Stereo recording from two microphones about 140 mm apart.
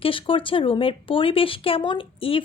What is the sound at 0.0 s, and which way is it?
A woman's voice, 40° left (ahead or behind).